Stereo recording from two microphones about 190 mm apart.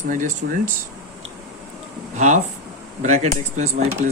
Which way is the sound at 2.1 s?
40° right (ahead or behind).